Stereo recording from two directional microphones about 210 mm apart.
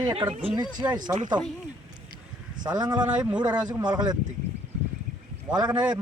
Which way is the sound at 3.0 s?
5° right (ahead or behind).